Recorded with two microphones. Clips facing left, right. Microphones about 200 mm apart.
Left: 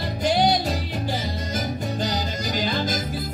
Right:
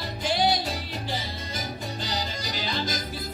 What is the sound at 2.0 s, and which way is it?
Music, 50° left (ahead or behind).